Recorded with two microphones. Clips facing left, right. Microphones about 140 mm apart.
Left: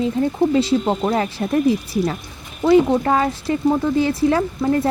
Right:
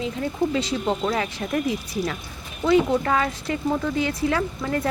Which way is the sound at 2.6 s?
30° left (ahead or behind).